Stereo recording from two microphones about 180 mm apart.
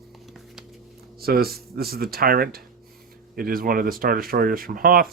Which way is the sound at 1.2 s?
60° right (ahead or behind).